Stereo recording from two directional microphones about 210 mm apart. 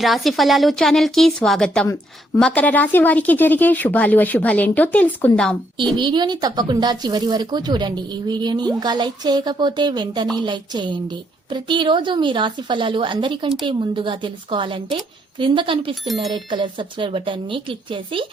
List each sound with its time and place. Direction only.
0.0 s a woman's voice: centre (ahead or behind)
6.0 s a woman's voice: 20° right (ahead or behind)